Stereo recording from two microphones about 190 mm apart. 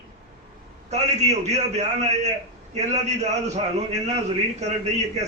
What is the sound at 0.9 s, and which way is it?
A man's voice, 35° right (ahead or behind).